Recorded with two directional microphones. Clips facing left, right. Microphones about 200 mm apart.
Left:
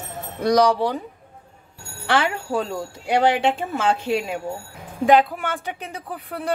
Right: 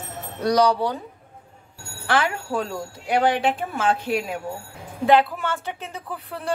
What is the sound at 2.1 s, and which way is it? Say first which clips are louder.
Speech: left 1 dB; 25° left (ahead or behind).